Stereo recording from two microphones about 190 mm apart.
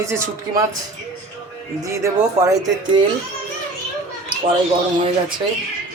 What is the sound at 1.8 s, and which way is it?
Speech, 20° right (ahead or behind).